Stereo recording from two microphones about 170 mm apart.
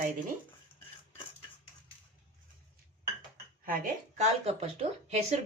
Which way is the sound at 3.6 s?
55° right (ahead or behind).